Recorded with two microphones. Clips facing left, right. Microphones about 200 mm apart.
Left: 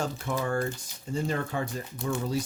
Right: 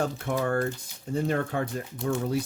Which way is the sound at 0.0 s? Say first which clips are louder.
Right 3 dB; 60° right (ahead or behind).